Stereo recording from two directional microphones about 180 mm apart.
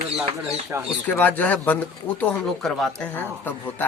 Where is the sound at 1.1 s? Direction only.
10° left (ahead or behind).